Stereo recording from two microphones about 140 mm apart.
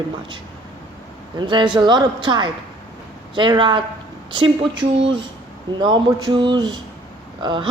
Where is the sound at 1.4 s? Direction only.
35° right (ahead or behind).